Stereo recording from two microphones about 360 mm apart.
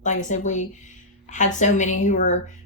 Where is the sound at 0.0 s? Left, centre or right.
Centre.